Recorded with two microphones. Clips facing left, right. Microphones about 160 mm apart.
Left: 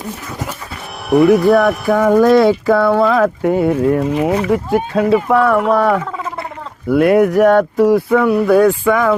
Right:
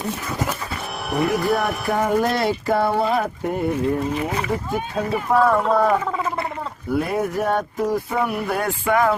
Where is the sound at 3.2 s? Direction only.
90° left.